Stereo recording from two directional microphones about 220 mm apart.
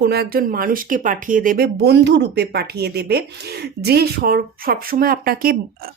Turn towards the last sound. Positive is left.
turn(degrees=-40)  # may be behind; listen again after turning